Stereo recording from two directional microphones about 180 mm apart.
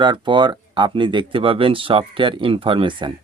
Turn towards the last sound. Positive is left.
turn(degrees=-25)  # may be behind; listen again after turning